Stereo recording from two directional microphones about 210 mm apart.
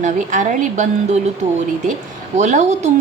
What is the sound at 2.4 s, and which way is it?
Speech, 35° right (ahead or behind).